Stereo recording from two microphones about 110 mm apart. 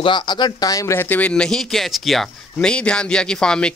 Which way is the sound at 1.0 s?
15° left (ahead or behind).